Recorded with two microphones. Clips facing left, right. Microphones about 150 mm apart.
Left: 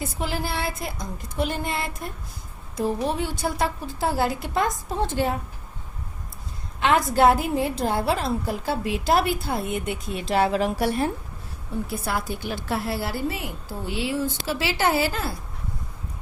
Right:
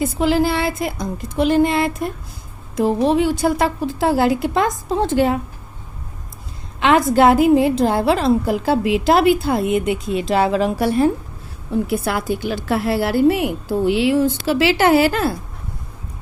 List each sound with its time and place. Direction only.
0.0 s a woman's voice: 90° right
6.7 s a woman's voice: 90° right
11.7 s a woman's voice: 85° right